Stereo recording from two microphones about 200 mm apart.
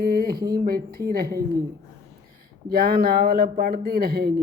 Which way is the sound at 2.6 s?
50° right (ahead or behind).